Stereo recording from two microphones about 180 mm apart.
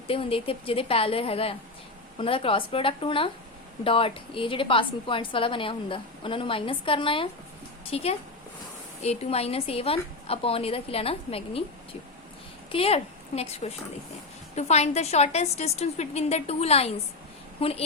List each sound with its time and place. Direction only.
0.1 s a woman's voice: 30° left (ahead or behind)